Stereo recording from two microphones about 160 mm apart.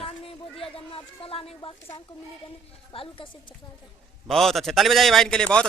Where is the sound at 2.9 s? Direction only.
35° left (ahead or behind).